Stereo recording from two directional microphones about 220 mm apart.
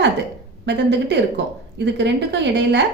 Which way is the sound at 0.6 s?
50° right (ahead or behind).